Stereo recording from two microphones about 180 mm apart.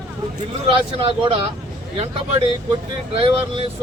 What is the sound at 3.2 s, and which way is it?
Speech, 30° right (ahead or behind).